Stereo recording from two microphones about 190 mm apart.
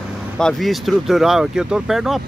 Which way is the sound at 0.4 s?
Centre (ahead or behind).